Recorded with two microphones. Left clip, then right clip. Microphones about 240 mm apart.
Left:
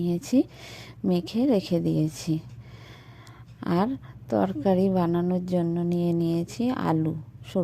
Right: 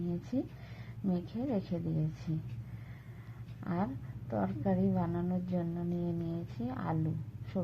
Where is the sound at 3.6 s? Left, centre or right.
Left.